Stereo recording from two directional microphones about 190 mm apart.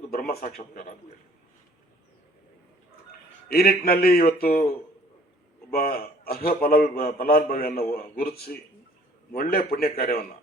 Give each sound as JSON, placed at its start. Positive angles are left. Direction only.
{"t": 0.1, "sound": "a man's voice", "side_deg": 50}
{"t": 3.5, "sound": "a man's voice", "side_deg": 50}
{"t": 5.7, "sound": "a man's voice", "side_deg": 50}
{"t": 9.3, "sound": "a man's voice", "side_deg": 50}